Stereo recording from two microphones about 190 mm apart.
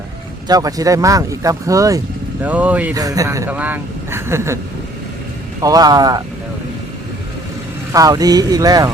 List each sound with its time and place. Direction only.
0.4 s speech: 20° right (ahead or behind)
2.9 s speech: 20° right (ahead or behind)
5.6 s speech: 20° right (ahead or behind)
7.9 s speech: 20° right (ahead or behind)